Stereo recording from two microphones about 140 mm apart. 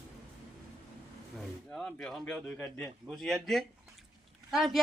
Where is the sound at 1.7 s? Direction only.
5° left (ahead or behind).